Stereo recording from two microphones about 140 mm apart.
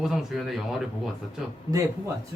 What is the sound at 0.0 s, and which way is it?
Speech, centre (ahead or behind).